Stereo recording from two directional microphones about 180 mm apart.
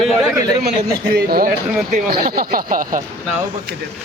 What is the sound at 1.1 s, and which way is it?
Speech, 55° right (ahead or behind).